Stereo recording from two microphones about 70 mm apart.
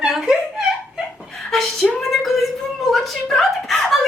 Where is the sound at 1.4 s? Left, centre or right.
Centre.